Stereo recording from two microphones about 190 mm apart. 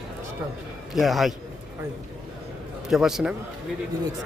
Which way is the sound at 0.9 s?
Centre (ahead or behind).